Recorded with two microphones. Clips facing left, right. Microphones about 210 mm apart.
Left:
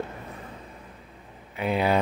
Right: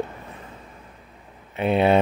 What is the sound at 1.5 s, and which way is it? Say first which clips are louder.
Speech: right 5 dB; 25° right (ahead or behind).